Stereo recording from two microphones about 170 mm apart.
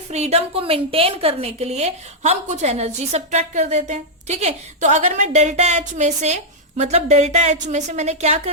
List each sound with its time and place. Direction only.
0.1 s a woman's voice: 40° right (ahead or behind)